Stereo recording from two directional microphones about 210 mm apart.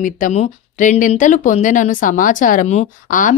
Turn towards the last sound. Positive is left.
turn(degrees=40)  # may be behind; listen again after turning